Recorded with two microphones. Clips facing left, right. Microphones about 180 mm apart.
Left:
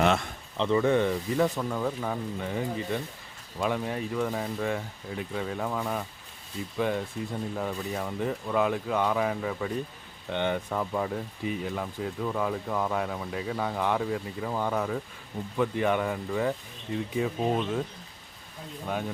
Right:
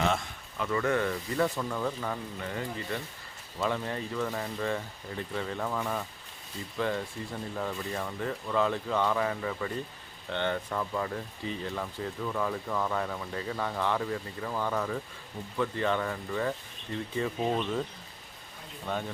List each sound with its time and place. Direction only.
0.0 s a man's voice: 65° left (ahead or behind)
0.5 s speech: 25° left (ahead or behind); by 17.8 s 10° left (ahead or behind)
18.9 s speech: 10° left (ahead or behind)